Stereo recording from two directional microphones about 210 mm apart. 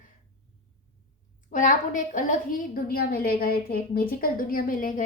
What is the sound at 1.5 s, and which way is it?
A woman's voice, 40° left (ahead or behind).